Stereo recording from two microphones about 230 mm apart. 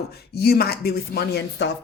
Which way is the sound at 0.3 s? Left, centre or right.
Left.